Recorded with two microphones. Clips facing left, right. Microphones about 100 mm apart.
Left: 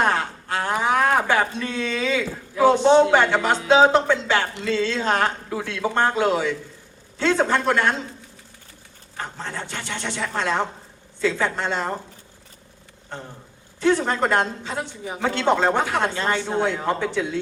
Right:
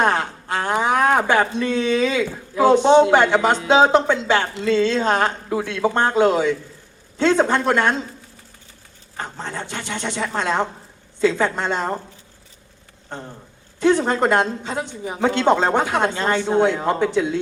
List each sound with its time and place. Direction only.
0.0 s a man's voice: 15° right (ahead or behind)
9.1 s a man's voice: 15° right (ahead or behind)
13.7 s a man's voice: 15° right (ahead or behind)